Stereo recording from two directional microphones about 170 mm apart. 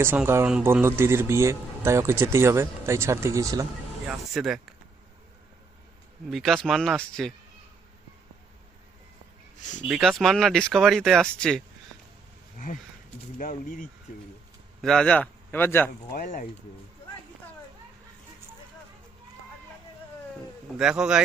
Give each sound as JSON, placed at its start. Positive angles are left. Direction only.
{"t": 0.0, "sound": "speech", "side_deg": -15}
{"t": 4.1, "sound": "speech", "side_deg": -5}
{"t": 6.3, "sound": "speech", "side_deg": 0}
{"t": 9.9, "sound": "speech", "side_deg": 0}
{"t": 13.4, "sound": "speech", "side_deg": 50}
{"t": 14.8, "sound": "a man's voice", "side_deg": 5}
{"t": 16.1, "sound": "speech", "side_deg": 50}
{"t": 20.7, "sound": "speech", "side_deg": -5}